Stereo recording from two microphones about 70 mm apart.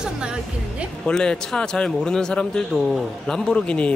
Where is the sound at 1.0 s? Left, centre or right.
Centre.